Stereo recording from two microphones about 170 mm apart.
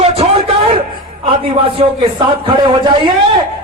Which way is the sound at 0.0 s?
35° right (ahead or behind).